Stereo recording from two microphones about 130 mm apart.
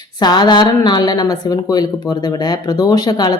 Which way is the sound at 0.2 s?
35° left (ahead or behind).